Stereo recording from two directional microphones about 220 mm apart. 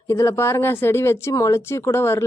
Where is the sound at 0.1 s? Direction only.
15° left (ahead or behind).